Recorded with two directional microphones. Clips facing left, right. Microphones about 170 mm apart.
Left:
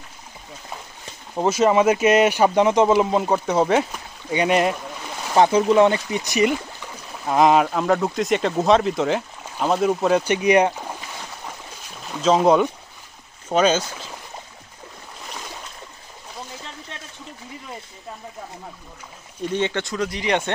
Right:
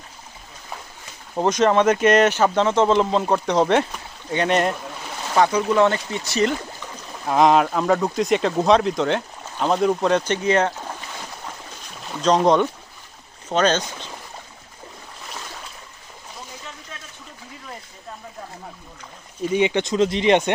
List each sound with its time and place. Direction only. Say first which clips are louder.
1.4 s speech: even; 5° left (ahead or behind)
5.3 s speech: left 3 dB; 25° left (ahead or behind)
7.3 s speech: even; centre (ahead or behind)
12.0 s speech: left 1 dB; centre (ahead or behind)
19.4 s speech: right 4 dB; 10° right (ahead or behind)